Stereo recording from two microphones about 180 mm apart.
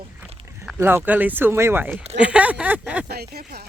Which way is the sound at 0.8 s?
15° right (ahead or behind).